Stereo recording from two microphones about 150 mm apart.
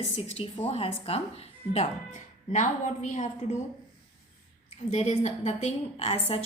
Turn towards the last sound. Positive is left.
turn(degrees=45)  # may be behind; listen again after turning